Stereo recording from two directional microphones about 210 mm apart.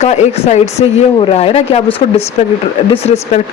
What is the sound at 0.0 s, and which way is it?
Speech, 30° left (ahead or behind).